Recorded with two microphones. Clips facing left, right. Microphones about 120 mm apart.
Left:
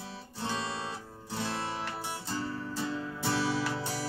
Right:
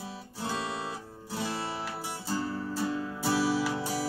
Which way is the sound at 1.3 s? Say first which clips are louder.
Right 1 dB; 10° right (ahead or behind).